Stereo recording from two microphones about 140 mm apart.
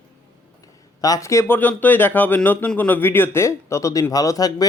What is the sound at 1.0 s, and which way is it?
Speech, 25° left (ahead or behind).